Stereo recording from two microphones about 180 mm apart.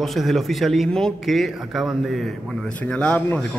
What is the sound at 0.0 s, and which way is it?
A man's voice, centre (ahead or behind).